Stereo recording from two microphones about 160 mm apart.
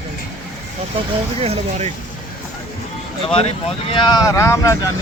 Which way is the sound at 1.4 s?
40° right (ahead or behind).